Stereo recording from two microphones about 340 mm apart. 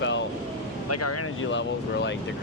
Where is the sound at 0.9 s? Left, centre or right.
Left.